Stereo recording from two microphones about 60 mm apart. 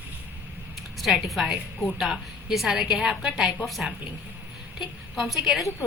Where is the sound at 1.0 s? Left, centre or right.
Centre.